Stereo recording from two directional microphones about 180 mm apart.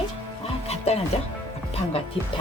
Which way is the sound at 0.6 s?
35° left (ahead or behind).